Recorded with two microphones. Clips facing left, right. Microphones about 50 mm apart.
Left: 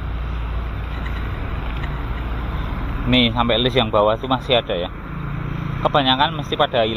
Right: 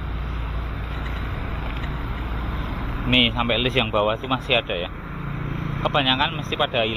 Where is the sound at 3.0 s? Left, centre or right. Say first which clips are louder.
Left 3 dB; right.